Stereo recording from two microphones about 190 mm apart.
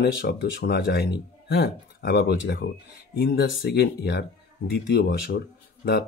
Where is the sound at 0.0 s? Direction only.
65° left (ahead or behind).